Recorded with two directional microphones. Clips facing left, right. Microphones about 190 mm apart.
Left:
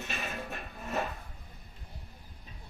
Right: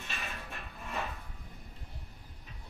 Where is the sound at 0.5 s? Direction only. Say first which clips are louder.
Left 5 dB; 40° left (ahead or behind).